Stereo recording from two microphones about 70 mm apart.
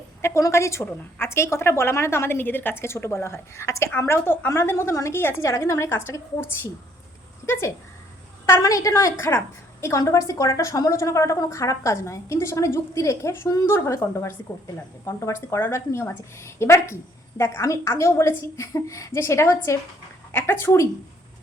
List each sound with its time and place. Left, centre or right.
0.2 s a sound: left
0.4 s a woman's voice: left
7.4 s speech: left
8.6 s a woman's voice: left
10.0 s a woman's voice: left
20.3 s a woman's voice: left